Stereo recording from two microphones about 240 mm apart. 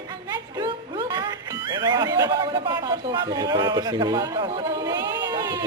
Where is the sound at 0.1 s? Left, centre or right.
Centre.